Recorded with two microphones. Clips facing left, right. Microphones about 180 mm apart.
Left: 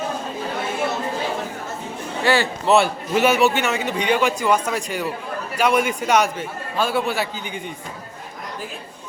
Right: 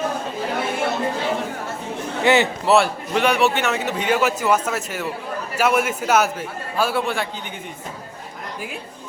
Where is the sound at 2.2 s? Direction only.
20° right (ahead or behind).